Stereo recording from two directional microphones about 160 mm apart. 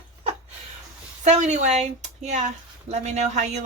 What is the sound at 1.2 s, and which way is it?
Speech, 45° right (ahead or behind).